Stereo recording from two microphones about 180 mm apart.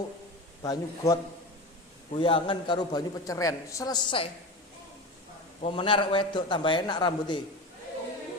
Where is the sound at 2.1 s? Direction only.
30° left (ahead or behind).